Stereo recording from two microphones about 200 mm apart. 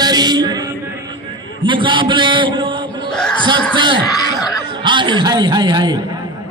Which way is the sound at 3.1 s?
5° left (ahead or behind).